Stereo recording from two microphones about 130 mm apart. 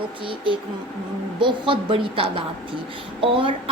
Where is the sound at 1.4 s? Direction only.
40° right (ahead or behind).